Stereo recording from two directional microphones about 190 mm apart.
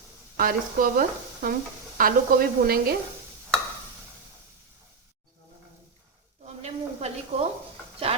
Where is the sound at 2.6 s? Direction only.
55° right (ahead or behind).